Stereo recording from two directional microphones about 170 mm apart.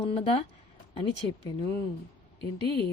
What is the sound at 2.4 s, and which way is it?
Speech, 30° right (ahead or behind).